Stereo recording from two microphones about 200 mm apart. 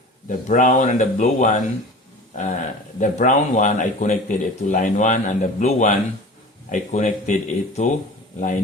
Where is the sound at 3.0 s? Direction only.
40° left (ahead or behind).